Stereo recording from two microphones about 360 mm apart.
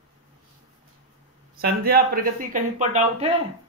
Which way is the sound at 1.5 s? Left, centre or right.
Right.